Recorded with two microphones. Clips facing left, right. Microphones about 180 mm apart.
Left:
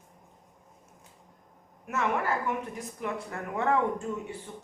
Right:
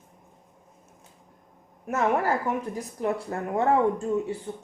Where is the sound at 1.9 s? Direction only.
35° right (ahead or behind).